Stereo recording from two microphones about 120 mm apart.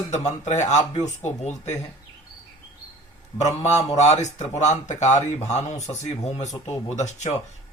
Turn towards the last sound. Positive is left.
turn(degrees=75)  # may be behind; listen again after turning